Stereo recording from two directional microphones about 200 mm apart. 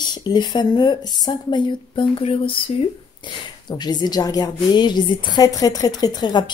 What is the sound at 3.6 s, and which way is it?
A woman's voice, 20° left (ahead or behind).